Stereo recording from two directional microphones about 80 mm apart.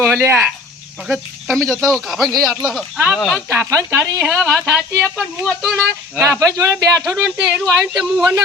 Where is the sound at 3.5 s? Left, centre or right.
Right.